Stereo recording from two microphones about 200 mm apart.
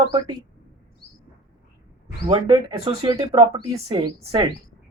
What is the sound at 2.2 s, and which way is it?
Speech, 20° right (ahead or behind).